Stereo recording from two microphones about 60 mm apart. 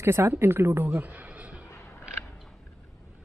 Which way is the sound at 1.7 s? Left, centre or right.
Left.